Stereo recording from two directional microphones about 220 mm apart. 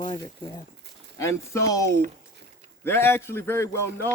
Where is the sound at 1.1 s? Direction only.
15° left (ahead or behind).